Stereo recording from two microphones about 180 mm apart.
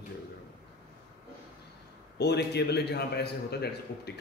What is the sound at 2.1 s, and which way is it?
A man's voice, 70° left (ahead or behind).